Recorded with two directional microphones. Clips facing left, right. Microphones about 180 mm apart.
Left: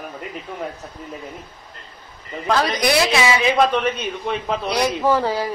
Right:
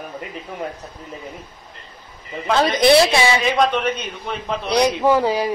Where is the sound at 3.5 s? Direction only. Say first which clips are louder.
Left 1 dB; centre (ahead or behind).